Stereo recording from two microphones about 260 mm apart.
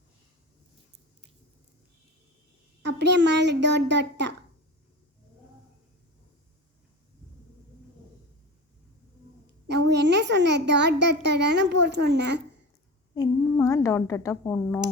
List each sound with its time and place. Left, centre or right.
2.8 s a child's voice: right
9.9 s a child's voice: right
13.1 s speech: centre